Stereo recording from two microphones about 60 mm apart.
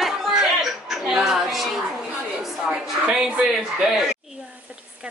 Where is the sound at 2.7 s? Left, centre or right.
Centre.